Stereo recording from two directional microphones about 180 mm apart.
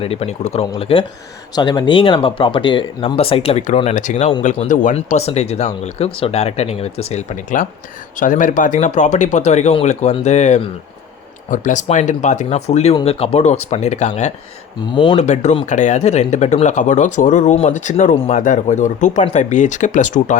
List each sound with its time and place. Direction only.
0.0 s speech: 35° left (ahead or behind)
14.9 s speech: 25° left (ahead or behind)
15.2 s speech: 40° left (ahead or behind)